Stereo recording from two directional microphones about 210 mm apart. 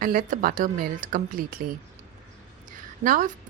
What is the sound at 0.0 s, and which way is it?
Speech, 40° right (ahead or behind).